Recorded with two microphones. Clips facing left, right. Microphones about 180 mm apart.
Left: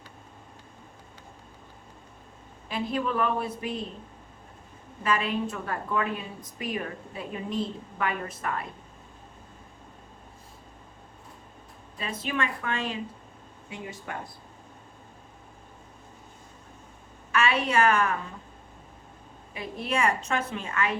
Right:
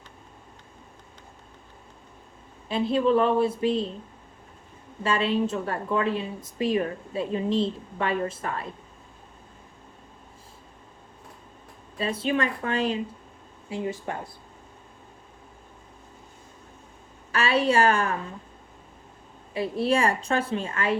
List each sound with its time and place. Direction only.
2.6 s a woman's voice: 30° right (ahead or behind)
5.0 s a woman's voice: 30° right (ahead or behind)
11.9 s a woman's voice: 30° right (ahead or behind)
17.3 s a woman's voice: 30° right (ahead or behind)
19.5 s a woman's voice: 30° right (ahead or behind)